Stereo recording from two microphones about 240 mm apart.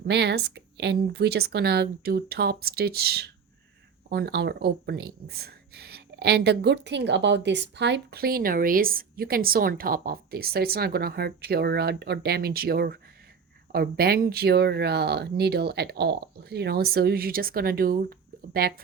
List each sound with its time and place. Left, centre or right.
0.1 s speech: right